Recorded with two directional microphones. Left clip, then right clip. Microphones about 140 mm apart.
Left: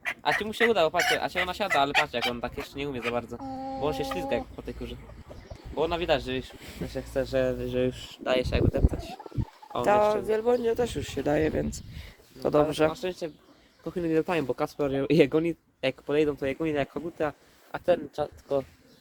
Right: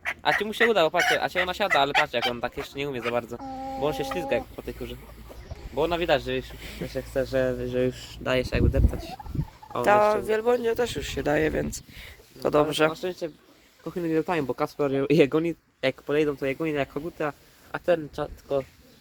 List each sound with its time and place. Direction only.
0.2 s speech: 35° right (ahead or behind)
6.6 s speech: 10° left (ahead or behind)
6.8 s speech: 45° right (ahead or behind); by 8.8 s 25° right (ahead or behind)
10.2 s speech: 15° left (ahead or behind)
12.9 s speech: 45° right (ahead or behind)